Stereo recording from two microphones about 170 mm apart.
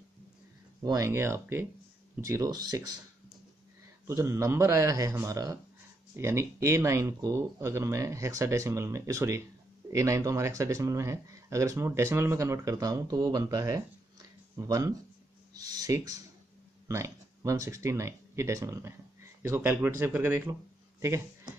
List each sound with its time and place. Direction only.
0.8 s speech: 20° right (ahead or behind)
4.1 s speech: 15° right (ahead or behind)